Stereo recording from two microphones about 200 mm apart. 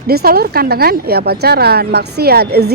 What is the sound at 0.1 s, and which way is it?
Speech, 50° right (ahead or behind).